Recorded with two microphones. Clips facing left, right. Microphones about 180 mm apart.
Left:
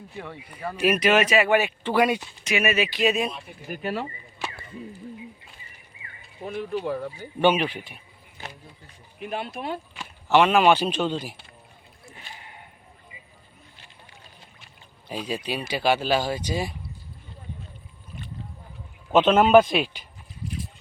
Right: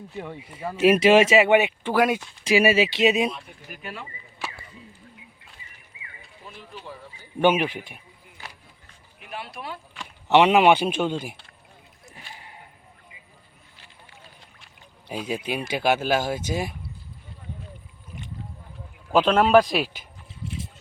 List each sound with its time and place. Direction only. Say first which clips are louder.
0.2 s speech: right 2 dB; 20° right (ahead or behind)
2.4 s speech: right 7 dB; 30° right (ahead or behind)
3.7 s speech: left 9 dB; 35° left (ahead or behind)
4.4 s a sound: left 1 dB; centre (ahead or behind)
6.4 s speech: left 13 dB; 65° left (ahead or behind)
7.4 s speech: right 1 dB; 10° right (ahead or behind)
8.4 s a sound: left 4 dB; 20° left (ahead or behind)
9.2 s speech: left 6 dB; 25° left (ahead or behind)
10.2 s speech: right 2 dB; 20° right (ahead or behind)
12.1 s a sound: right 1 dB; 20° left (ahead or behind)
15.1 s speech: right 1 dB; 10° right (ahead or behind)
19.1 s a man's voice: left 1 dB; 5° left (ahead or behind)
20.4 s a sound: left 1 dB; 25° right (ahead or behind)